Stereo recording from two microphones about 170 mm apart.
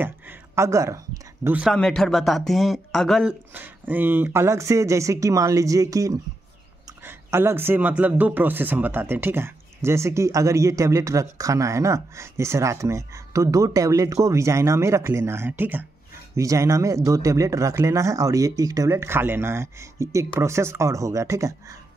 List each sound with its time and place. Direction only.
0.0 s speech: 15° right (ahead or behind)
1.8 s speech: 5° left (ahead or behind)
3.5 s a man's voice: 10° right (ahead or behind)